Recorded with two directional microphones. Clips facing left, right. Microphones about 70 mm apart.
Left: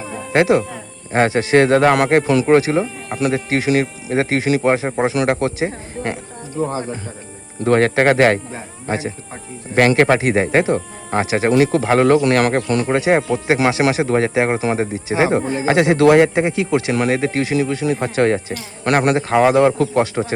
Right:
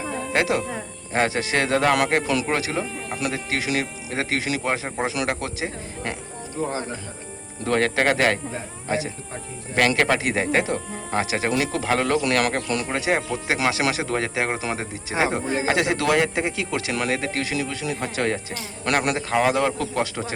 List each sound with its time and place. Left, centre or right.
0.3 s speech: left
7.6 s speech: left
9.7 s speech: left